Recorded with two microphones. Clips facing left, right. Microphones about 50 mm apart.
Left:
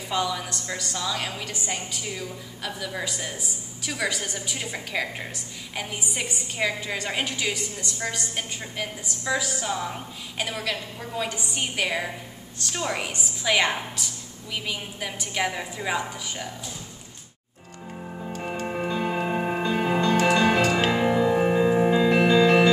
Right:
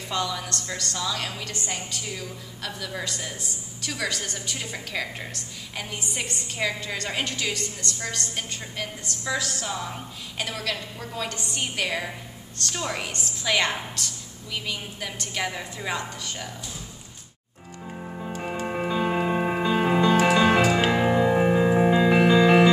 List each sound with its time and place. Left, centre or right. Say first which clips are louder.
0.1 s a woman's voice: left 2 dB; centre
18.0 s music: even; centre